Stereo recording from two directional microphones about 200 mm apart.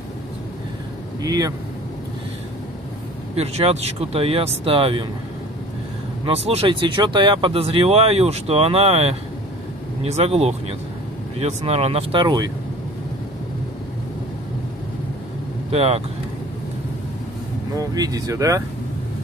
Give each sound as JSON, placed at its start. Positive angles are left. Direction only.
{"t": 1.2, "sound": "speech", "side_deg": -20}
{"t": 3.3, "sound": "speech", "side_deg": -30}
{"t": 6.2, "sound": "speech", "side_deg": -30}
{"t": 15.7, "sound": "speech", "side_deg": -30}
{"t": 17.7, "sound": "speech", "side_deg": -20}